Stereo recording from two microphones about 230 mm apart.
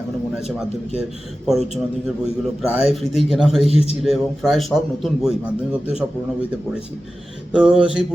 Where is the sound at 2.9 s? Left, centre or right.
Centre.